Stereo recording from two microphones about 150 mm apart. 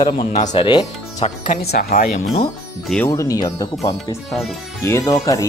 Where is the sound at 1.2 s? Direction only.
75° left (ahead or behind).